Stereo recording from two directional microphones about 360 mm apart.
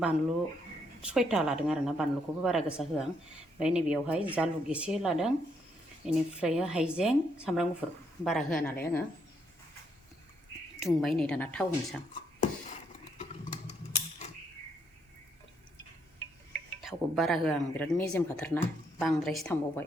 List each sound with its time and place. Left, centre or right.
1.0 s speech: centre
10.8 s speech: centre
13.1 s a sound: centre
16.5 s speech: centre